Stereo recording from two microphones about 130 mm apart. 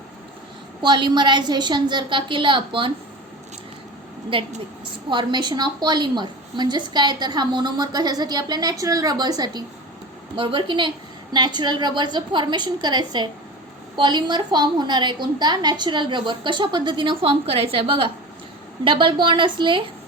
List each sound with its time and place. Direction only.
0.8 s a woman's voice: 35° right (ahead or behind)
4.3 s a woman's voice: 40° right (ahead or behind)